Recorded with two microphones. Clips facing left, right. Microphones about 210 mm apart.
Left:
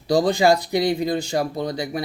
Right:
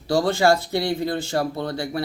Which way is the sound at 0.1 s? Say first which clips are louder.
Left 2 dB; 15° left (ahead or behind).